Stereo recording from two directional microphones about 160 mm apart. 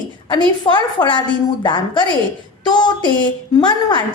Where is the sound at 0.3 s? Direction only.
30° left (ahead or behind).